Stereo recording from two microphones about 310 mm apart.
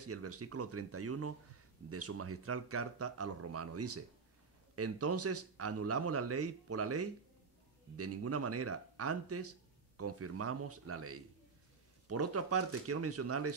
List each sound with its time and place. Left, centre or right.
0.0 s speech: right